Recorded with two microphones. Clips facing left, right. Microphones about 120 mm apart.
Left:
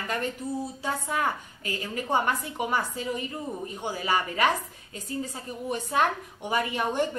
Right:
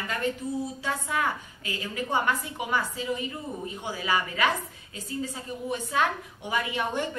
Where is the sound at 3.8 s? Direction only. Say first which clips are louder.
Left 1 dB; 40° left (ahead or behind).